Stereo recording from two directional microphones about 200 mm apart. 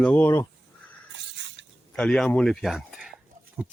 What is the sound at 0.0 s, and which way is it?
Speech, 10° left (ahead or behind).